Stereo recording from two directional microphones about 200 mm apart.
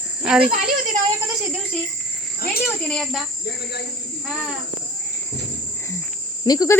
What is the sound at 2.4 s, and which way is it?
Speech, 50° left (ahead or behind).